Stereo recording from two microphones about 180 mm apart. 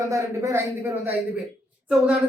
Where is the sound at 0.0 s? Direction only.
15° right (ahead or behind).